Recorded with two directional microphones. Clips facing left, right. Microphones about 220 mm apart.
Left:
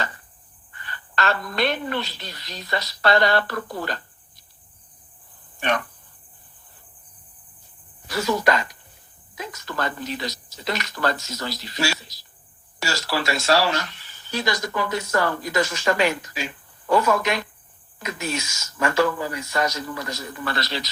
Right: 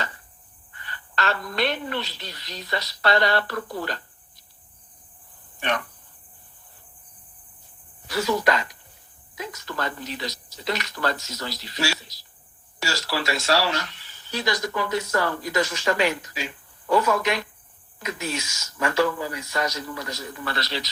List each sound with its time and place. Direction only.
0.9 s speech: 45° left (ahead or behind)
5.5 s speech: 45° left (ahead or behind)
8.1 s speech: 45° left (ahead or behind)